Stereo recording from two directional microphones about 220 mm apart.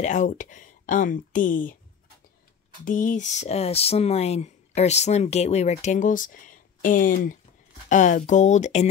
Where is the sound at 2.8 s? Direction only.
35° left (ahead or behind).